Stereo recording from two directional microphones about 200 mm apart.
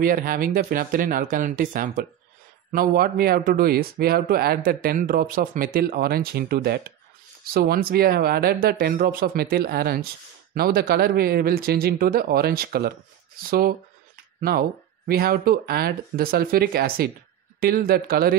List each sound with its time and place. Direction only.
0.0 s speech: 45° right (ahead or behind)